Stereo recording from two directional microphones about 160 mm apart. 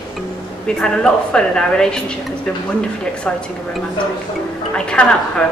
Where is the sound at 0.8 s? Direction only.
5° left (ahead or behind).